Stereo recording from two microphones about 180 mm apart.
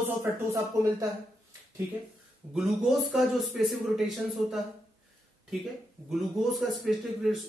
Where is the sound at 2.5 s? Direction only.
Centre (ahead or behind).